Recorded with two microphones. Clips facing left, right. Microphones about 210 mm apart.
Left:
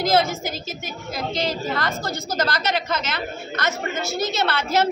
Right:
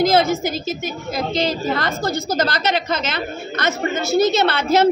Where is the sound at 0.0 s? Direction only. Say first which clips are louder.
Right 4 dB; 20° right (ahead or behind).